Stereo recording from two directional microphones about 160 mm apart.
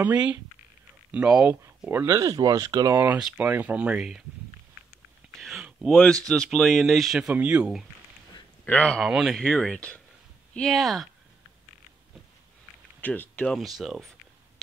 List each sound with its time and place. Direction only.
0.0 s speech: 10° right (ahead or behind)
3.0 s speech: 10° right (ahead or behind)
5.3 s a sound: centre (ahead or behind)
6.2 s speech: 5° left (ahead or behind)
8.6 s speech: 5° left (ahead or behind)
13.0 s speech: 10° left (ahead or behind)